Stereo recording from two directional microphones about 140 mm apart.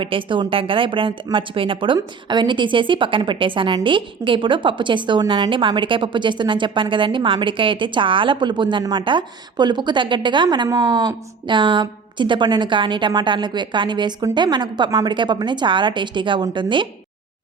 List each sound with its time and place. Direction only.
0.0 s a woman's voice: 40° right (ahead or behind)